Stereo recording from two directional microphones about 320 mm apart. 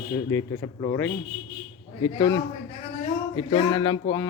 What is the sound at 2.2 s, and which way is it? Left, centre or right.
Speech, centre.